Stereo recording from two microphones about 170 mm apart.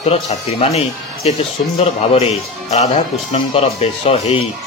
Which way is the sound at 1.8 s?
40° left (ahead or behind).